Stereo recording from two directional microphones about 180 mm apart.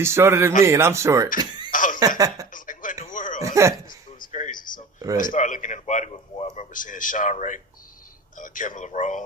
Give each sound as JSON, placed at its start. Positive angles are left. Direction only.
{"t": 0.0, "sound": "speech", "side_deg": -15}
{"t": 1.7, "sound": "a sound", "side_deg": 45}
{"t": 2.0, "sound": "speech", "side_deg": -20}
{"t": 2.5, "sound": "radio", "side_deg": 45}
{"t": 3.4, "sound": "speech", "side_deg": -15}
{"t": 4.2, "sound": "a sound", "side_deg": 45}
{"t": 5.1, "sound": "speech", "side_deg": 45}